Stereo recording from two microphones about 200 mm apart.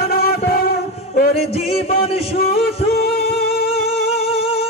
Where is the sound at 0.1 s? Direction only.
50° left (ahead or behind).